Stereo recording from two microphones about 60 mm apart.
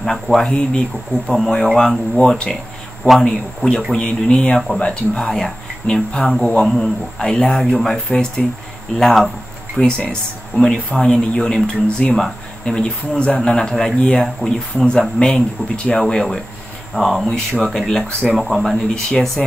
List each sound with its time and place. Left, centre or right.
0.0 s speech: centre